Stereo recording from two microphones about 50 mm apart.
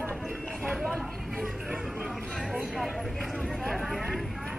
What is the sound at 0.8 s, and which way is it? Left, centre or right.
Speech, centre.